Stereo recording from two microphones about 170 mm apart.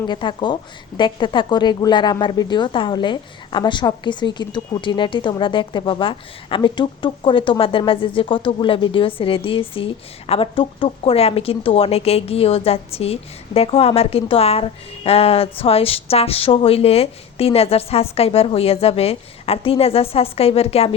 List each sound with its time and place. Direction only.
0.1 s a woman's voice: 25° left (ahead or behind)